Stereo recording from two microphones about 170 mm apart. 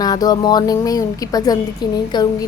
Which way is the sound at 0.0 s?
20° left (ahead or behind).